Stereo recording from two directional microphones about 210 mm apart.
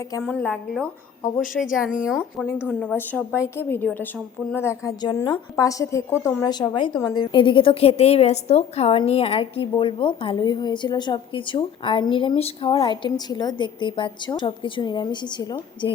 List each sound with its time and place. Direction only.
0.1 s a woman's voice: 10° left (ahead or behind)
2.5 s a woman's voice: 10° left (ahead or behind)